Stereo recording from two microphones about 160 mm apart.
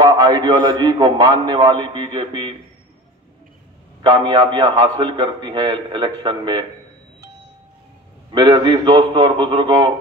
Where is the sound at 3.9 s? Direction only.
30° right (ahead or behind).